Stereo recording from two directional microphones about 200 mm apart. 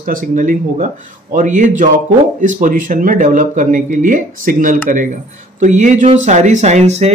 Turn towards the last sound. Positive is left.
turn(degrees=-35)  # may be behind; listen again after turning